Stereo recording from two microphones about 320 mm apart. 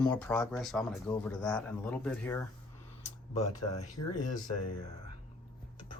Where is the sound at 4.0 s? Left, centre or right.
Left.